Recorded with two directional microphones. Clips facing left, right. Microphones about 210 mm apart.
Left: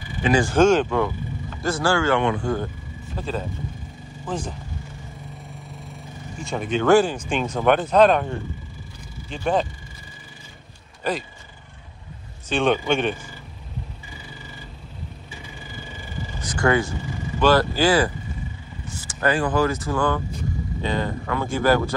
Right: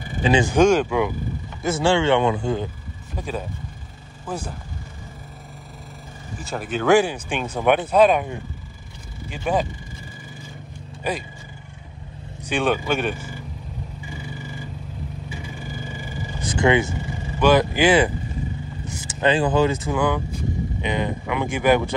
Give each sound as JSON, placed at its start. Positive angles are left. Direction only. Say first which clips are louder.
{"t": 0.3, "sound": "speech", "louder": "even", "side_deg": -20}
{"t": 1.6, "sound": "speech", "louder": "right 2 dB", "side_deg": -25}
{"t": 6.3, "sound": "speech", "louder": "left 2 dB", "side_deg": -5}
{"t": 12.4, "sound": "speech", "louder": "left 1 dB", "side_deg": -10}
{"t": 16.3, "sound": "vehicle", "louder": "right 2 dB", "side_deg": -25}
{"t": 17.4, "sound": "speech", "louder": "right 1 dB", "side_deg": -15}